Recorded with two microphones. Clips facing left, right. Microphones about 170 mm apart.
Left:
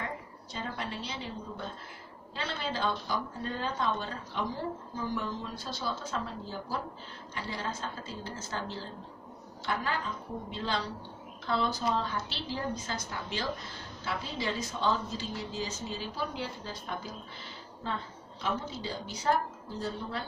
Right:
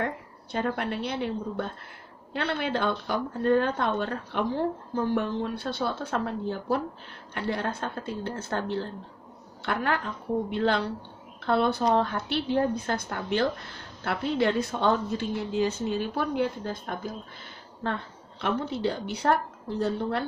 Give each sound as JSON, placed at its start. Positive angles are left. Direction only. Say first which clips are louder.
{"t": 0.0, "sound": "a woman's voice", "louder": "right 8 dB", "side_deg": -60}